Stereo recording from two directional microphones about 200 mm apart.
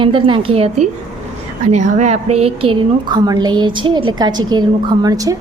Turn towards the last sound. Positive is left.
turn(degrees=-20)  # may be behind; listen again after turning